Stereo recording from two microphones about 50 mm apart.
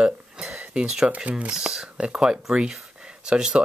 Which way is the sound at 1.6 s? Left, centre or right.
Centre.